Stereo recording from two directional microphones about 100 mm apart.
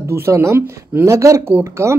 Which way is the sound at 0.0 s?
30° right (ahead or behind).